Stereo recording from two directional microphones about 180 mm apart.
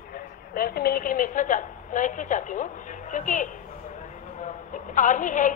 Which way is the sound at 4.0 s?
45° left (ahead or behind).